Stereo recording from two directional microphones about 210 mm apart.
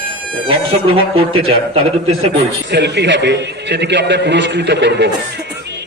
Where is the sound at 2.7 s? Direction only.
55° right (ahead or behind).